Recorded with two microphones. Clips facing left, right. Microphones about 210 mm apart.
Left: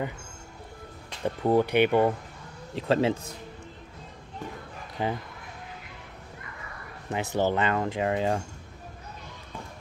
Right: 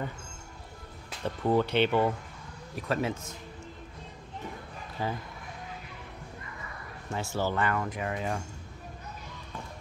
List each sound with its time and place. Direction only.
1.2 s speech: 15° left (ahead or behind)
2.7 s speech: 25° left (ahead or behind)
5.0 s speech: 20° left (ahead or behind)
7.1 s speech: 20° left (ahead or behind)